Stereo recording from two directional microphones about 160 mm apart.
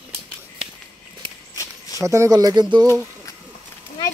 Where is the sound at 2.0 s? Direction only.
20° right (ahead or behind).